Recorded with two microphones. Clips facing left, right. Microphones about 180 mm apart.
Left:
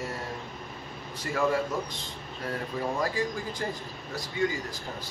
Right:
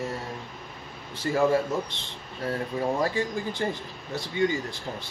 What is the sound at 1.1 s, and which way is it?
Speech, 30° right (ahead or behind).